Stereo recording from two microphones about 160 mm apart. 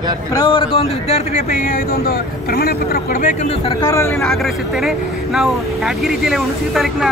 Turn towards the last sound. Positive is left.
turn(degrees=0)  # may be behind; listen again after turning